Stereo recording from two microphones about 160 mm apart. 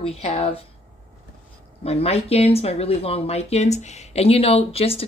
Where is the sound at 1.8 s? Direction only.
40° left (ahead or behind).